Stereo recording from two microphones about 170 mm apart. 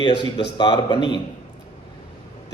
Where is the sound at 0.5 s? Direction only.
25° left (ahead or behind).